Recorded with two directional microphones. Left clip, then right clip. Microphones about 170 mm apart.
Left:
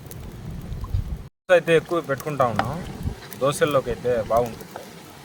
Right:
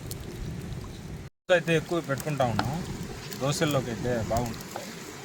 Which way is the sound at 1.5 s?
25° left (ahead or behind).